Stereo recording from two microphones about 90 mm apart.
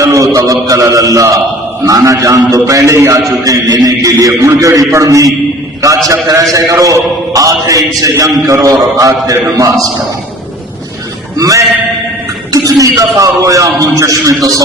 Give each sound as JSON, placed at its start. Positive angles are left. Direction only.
{"t": 0.0, "sound": "mantra", "side_deg": -35}
{"t": 1.9, "sound": "a man's voice", "side_deg": -40}
{"t": 11.3, "sound": "music", "side_deg": -40}
{"t": 12.5, "sound": "a man's voice", "side_deg": -40}